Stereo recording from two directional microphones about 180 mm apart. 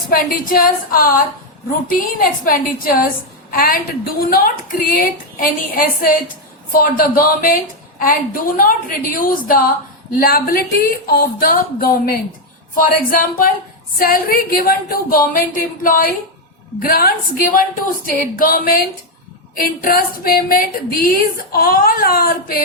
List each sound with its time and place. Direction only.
0.1 s a woman's voice: 50° left (ahead or behind)